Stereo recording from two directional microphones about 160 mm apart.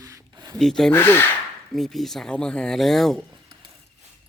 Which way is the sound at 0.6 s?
Centre (ahead or behind).